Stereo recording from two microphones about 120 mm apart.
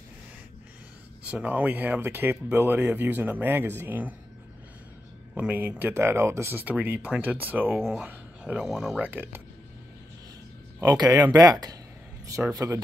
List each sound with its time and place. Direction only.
1.2 s speech: 10° right (ahead or behind)
5.3 s speech: 10° right (ahead or behind)
7.8 s speech: 5° right (ahead or behind)
11.0 s speech: 35° right (ahead or behind)